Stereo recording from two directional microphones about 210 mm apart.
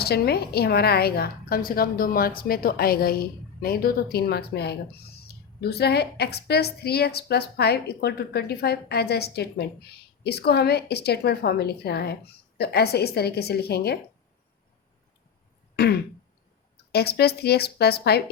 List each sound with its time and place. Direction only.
0.0 s a woman's voice: 50° left (ahead or behind)
15.7 s throat clearing: 50° left (ahead or behind)
16.9 s a woman's voice: 50° left (ahead or behind)